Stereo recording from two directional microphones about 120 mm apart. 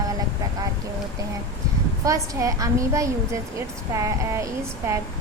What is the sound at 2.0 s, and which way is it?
A woman's voice, 25° right (ahead or behind).